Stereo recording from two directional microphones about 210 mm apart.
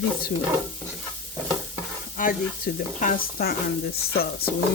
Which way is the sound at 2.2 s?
40° left (ahead or behind).